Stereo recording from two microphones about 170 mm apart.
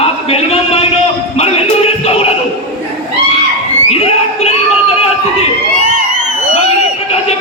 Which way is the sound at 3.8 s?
35° left (ahead or behind).